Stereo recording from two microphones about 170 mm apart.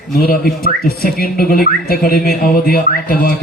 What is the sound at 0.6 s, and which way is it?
Whistling, 60° left (ahead or behind).